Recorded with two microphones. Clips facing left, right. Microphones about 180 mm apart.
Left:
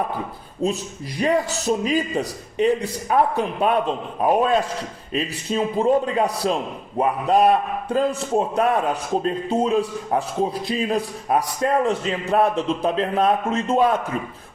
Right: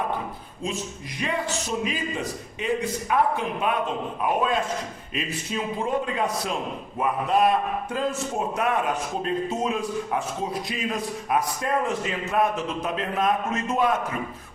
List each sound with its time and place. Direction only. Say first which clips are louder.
0.6 s a man's voice: left 7 dB; 40° left (ahead or behind)